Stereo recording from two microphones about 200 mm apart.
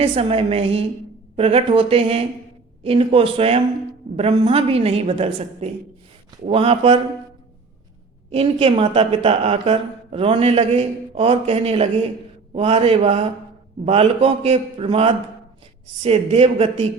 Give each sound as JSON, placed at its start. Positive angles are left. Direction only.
{"t": 0.0, "sound": "a woman's voice", "side_deg": -30}
{"t": 8.3, "sound": "speech", "side_deg": -30}